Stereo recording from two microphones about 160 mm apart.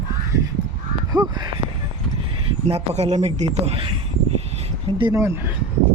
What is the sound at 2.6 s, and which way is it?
Speech, 40° right (ahead or behind).